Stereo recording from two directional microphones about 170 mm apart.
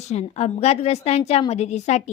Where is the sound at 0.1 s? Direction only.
40° left (ahead or behind).